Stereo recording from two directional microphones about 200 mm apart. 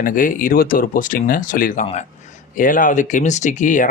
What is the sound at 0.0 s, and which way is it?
Speech, 45° left (ahead or behind).